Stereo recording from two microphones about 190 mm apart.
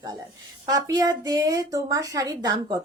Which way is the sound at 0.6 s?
20° right (ahead or behind).